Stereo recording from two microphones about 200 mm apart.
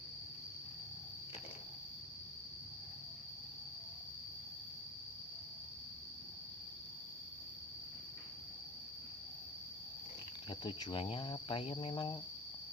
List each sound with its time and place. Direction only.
10.5 s cricket: 20° left (ahead or behind)